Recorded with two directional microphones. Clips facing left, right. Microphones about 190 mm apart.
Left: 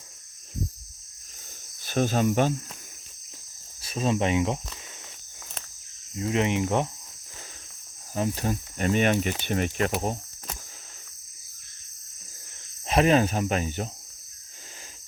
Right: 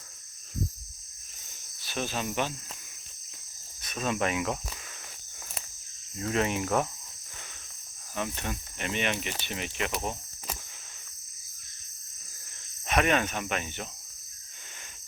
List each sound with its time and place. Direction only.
1.8 s speech: 50° left (ahead or behind)
3.8 s speech: 30° left (ahead or behind)
6.1 s cricket: 20° left (ahead or behind)
8.1 s speech: 35° left (ahead or behind)
12.8 s speech: 30° left (ahead or behind)